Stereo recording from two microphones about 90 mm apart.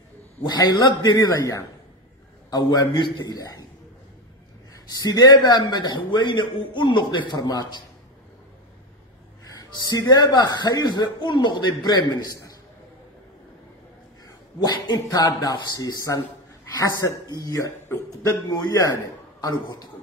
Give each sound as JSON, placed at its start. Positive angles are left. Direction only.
{"t": 0.4, "sound": "speech", "side_deg": 50}
{"t": 3.3, "sound": "speech", "side_deg": 40}
{"t": 4.9, "sound": "speech", "side_deg": 50}
{"t": 9.4, "sound": "speech", "side_deg": 45}
{"t": 14.2, "sound": "speech", "side_deg": 50}
{"t": 17.4, "sound": "a man's voice", "side_deg": 40}